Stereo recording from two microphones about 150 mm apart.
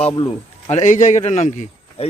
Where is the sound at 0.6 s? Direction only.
55° left (ahead or behind).